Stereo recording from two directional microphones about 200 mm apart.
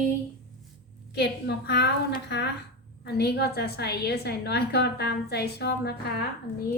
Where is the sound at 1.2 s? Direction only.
55° left (ahead or behind).